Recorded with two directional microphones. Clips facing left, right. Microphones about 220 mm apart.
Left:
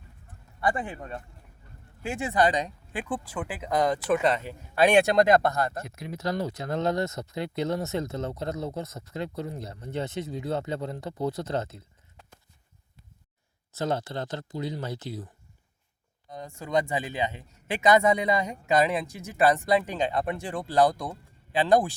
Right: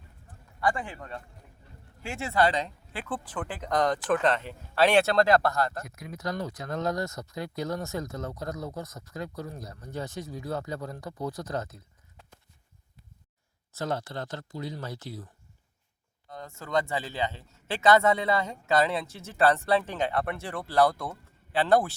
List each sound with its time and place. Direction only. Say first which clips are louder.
0.6 s speech: left 1 dB; 20° left (ahead or behind)
13.7 s speech: left 3 dB; 20° left (ahead or behind)
16.3 s speech: left 2 dB; 15° left (ahead or behind)